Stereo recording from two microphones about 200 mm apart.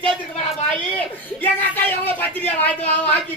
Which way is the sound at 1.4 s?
10° left (ahead or behind).